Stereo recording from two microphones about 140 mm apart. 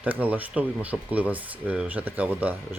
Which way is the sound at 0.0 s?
10° right (ahead or behind).